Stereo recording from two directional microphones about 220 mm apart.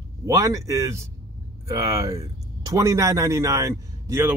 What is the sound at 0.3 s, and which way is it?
A man's voice, 15° right (ahead or behind).